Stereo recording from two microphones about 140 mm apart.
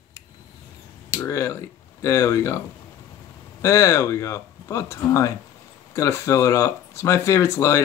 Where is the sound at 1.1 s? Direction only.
20° left (ahead or behind).